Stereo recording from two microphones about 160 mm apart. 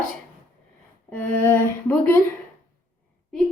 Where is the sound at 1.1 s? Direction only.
15° left (ahead or behind).